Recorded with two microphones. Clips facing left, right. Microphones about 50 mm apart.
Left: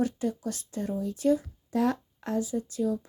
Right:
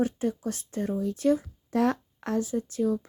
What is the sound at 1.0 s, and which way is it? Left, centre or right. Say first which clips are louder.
Speech: even; right.